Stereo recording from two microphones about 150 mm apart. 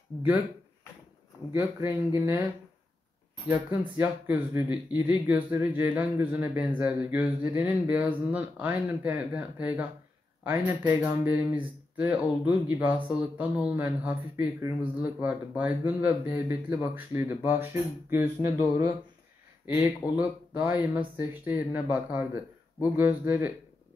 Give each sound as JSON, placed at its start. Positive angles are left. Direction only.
{"t": 0.1, "sound": "speech", "side_deg": 15}
{"t": 1.5, "sound": "speech", "side_deg": -15}
{"t": 3.5, "sound": "speech", "side_deg": -15}
{"t": 19.6, "sound": "speech", "side_deg": -15}